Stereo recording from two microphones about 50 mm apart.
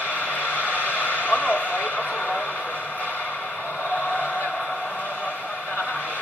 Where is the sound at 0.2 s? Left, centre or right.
Left.